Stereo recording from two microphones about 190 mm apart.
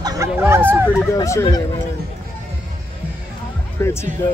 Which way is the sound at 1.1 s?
15° left (ahead or behind).